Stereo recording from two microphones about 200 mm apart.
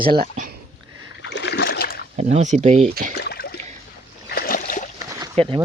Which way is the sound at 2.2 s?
35° right (ahead or behind).